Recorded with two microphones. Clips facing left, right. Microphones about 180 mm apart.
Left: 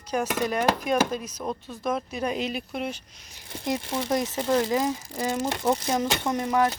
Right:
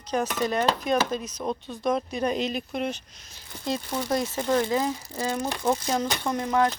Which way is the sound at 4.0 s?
20° left (ahead or behind).